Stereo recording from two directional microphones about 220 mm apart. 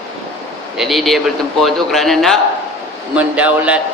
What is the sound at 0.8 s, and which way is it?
A man's voice, centre (ahead or behind).